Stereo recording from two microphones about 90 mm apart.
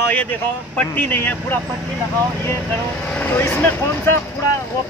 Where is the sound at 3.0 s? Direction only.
20° left (ahead or behind).